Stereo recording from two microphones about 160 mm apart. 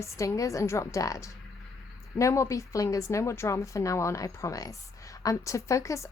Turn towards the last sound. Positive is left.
turn(degrees=20)  # may be behind; listen again after turning